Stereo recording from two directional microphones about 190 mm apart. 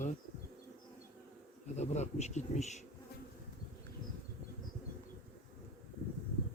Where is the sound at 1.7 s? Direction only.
35° left (ahead or behind).